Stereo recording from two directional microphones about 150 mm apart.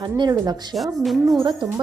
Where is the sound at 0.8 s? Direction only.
Centre (ahead or behind).